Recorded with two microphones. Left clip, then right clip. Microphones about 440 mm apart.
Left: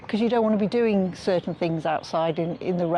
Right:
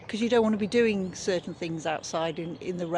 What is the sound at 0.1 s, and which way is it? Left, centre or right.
Speech, left.